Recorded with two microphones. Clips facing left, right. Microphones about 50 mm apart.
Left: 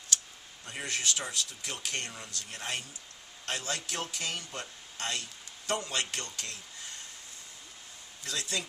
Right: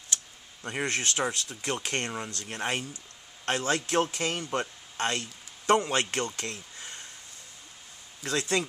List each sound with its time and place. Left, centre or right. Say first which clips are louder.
0.7 s speech: right 5 dB; right
8.2 s speech: right 8 dB; right